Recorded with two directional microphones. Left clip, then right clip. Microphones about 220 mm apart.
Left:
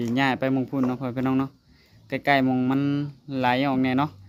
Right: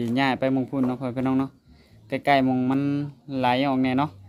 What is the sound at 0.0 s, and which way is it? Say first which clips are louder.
Speech: even; centre (ahead or behind).